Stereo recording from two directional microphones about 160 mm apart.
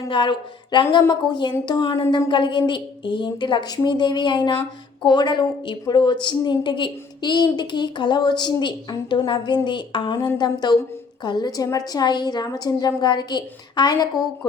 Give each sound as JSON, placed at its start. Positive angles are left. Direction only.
{"t": 0.1, "sound": "a woman's voice", "side_deg": 30}